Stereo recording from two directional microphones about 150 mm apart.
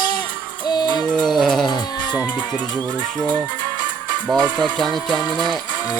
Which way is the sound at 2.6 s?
30° right (ahead or behind).